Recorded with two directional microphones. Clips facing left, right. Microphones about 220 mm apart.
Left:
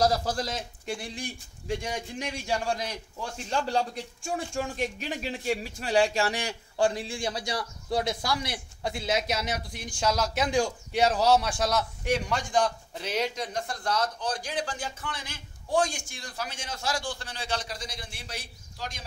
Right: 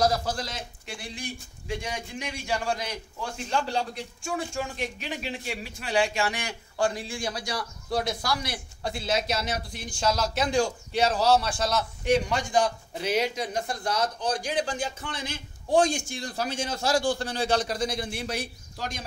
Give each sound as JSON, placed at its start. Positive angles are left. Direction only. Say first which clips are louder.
{"t": 0.0, "sound": "a man's voice", "louder": "even", "side_deg": 35}
{"t": 12.0, "sound": "a man's voice", "louder": "right 4 dB", "side_deg": 5}
{"t": 16.2, "sound": "a man's voice", "louder": "right 7 dB", "side_deg": -30}